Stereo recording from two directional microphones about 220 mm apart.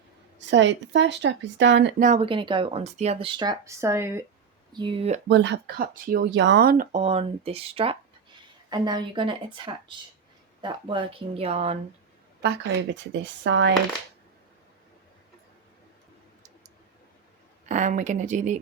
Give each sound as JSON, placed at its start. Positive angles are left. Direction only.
{"t": 0.3, "sound": "speech", "side_deg": -55}
{"t": 2.0, "sound": "speech", "side_deg": -30}
{"t": 4.7, "sound": "speech", "side_deg": -20}
{"t": 5.3, "sound": "speech", "side_deg": -55}
{"t": 12.4, "sound": "speech", "side_deg": -50}
{"t": 17.7, "sound": "speech", "side_deg": -35}